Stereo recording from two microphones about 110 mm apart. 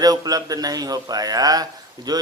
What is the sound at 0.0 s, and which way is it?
Speech, 35° right (ahead or behind).